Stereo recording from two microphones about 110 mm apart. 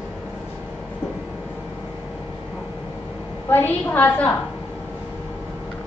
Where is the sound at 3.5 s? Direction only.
15° left (ahead or behind).